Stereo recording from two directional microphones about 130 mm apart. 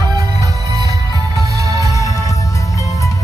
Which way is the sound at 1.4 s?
25° right (ahead or behind).